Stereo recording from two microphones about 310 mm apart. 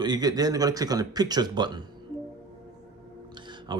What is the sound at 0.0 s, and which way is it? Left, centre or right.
Speech, centre.